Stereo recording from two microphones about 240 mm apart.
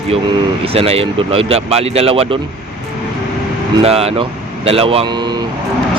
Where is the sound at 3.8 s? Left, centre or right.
Right.